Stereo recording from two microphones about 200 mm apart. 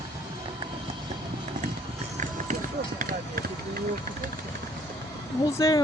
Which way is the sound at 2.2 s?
40° right (ahead or behind).